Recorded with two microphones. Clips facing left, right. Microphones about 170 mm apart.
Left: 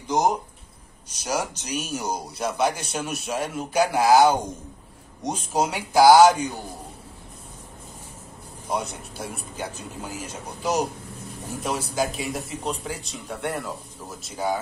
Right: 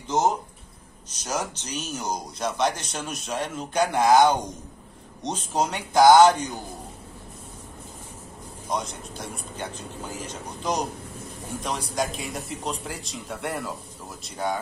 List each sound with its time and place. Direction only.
0.1 s speech: 15° left (ahead or behind)
8.6 s speech: 10° left (ahead or behind)